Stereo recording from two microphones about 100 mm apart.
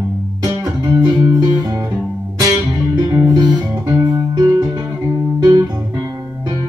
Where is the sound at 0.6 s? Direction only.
35° right (ahead or behind).